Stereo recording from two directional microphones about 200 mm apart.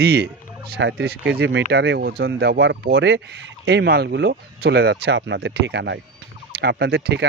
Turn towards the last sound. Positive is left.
turn(degrees=-55)  # may be behind; listen again after turning